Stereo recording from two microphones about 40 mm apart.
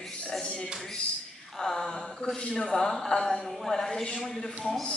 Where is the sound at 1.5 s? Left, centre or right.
Centre.